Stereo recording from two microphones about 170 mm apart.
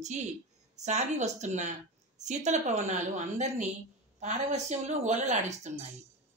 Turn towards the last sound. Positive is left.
turn(degrees=-45)  # may be behind; listen again after turning